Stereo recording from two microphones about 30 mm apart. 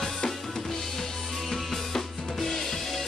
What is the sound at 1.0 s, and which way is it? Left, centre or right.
Drum kit, centre.